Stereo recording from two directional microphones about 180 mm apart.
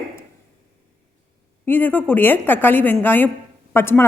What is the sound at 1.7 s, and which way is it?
A woman's voice, 10° left (ahead or behind).